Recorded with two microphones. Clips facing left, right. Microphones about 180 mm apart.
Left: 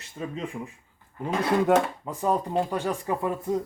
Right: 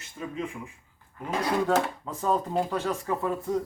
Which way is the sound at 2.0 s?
15° left (ahead or behind).